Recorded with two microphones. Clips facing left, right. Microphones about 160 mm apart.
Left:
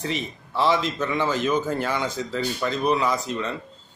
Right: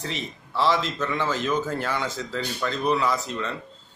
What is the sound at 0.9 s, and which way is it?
Speech, 15° left (ahead or behind).